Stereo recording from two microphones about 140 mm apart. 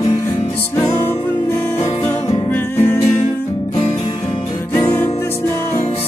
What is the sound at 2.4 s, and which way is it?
Music, 15° left (ahead or behind).